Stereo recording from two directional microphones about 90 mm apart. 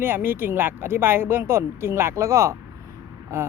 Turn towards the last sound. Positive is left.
turn(degrees=-30)  # may be behind; listen again after turning